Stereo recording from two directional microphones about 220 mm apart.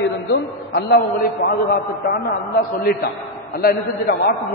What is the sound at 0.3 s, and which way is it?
Speech, 45° left (ahead or behind).